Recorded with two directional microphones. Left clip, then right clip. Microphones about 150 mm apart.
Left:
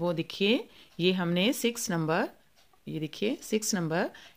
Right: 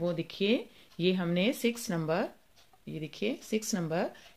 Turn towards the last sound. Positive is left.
turn(degrees=50)  # may be behind; listen again after turning